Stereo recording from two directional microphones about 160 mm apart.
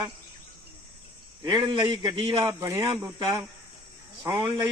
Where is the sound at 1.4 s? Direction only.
25° right (ahead or behind).